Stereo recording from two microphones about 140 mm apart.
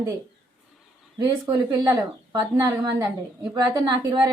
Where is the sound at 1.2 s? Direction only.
30° right (ahead or behind).